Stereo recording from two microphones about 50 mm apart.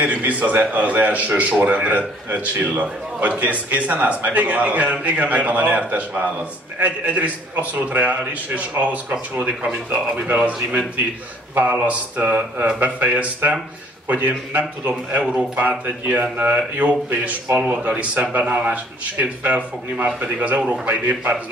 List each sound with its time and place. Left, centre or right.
0.0 s a man's voice: right
7.9 s a man's voice: right